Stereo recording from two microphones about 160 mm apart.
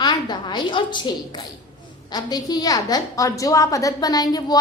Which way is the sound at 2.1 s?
25° left (ahead or behind).